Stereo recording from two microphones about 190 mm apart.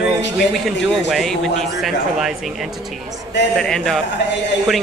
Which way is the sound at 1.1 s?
Centre (ahead or behind).